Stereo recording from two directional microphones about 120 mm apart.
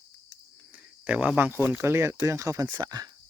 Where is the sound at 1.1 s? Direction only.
15° right (ahead or behind); by 3.1 s 30° right (ahead or behind).